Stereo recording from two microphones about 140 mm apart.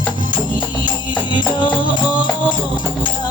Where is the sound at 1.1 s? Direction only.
35° left (ahead or behind).